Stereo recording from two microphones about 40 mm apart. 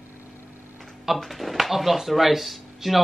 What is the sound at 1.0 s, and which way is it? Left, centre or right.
Speech, centre.